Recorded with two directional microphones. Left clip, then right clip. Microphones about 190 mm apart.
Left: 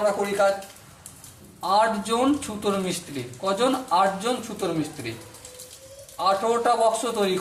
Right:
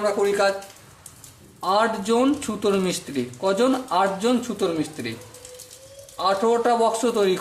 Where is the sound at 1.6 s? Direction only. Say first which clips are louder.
Even; 55° right (ahead or behind).